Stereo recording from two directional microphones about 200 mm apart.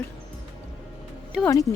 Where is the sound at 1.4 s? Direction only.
15° left (ahead or behind).